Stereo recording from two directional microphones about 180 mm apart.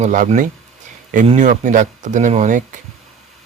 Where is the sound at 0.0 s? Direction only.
45° right (ahead or behind).